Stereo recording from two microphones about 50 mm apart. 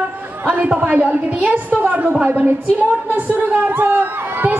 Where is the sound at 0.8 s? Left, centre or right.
Right.